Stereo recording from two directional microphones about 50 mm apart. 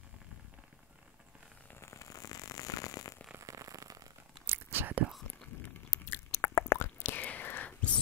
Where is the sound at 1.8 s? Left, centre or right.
Left.